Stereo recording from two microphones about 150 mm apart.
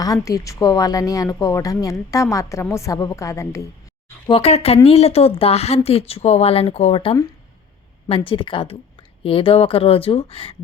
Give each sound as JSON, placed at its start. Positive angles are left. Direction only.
{"t": 0.0, "sound": "a woman's voice", "side_deg": 25}
{"t": 4.3, "sound": "a woman's voice", "side_deg": 40}